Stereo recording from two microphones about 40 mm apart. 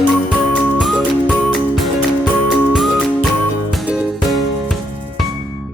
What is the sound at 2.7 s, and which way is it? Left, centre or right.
Music, centre.